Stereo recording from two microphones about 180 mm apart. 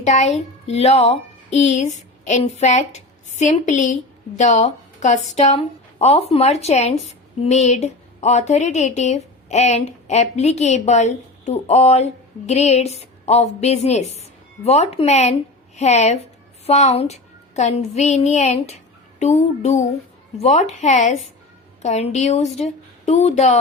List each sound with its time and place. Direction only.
0.0 s a woman's voice: 40° left (ahead or behind)